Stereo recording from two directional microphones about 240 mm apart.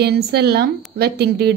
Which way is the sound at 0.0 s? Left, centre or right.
Right.